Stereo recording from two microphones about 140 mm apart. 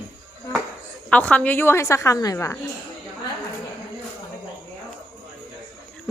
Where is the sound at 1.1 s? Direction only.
10° left (ahead or behind).